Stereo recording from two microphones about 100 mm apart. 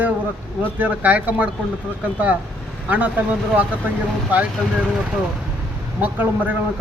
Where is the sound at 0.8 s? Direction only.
15° right (ahead or behind).